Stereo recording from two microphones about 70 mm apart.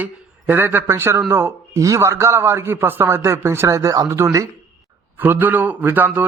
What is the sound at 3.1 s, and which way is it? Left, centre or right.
Speech, right.